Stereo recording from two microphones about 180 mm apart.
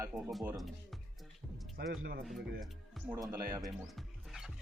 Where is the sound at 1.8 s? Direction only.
55° right (ahead or behind).